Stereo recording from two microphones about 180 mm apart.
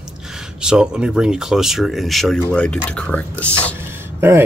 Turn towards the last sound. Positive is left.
turn(degrees=-10)  # may be behind; listen again after turning